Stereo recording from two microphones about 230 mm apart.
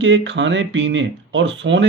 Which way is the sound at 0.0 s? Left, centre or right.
Right.